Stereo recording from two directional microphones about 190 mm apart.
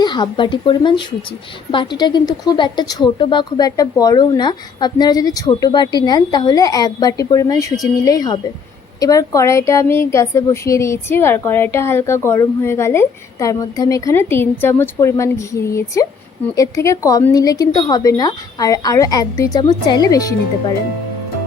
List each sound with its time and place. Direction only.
0.0 s a woman's voice: 25° left (ahead or behind)